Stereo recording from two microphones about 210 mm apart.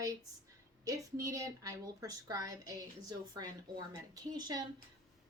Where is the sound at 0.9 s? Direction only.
15° right (ahead or behind).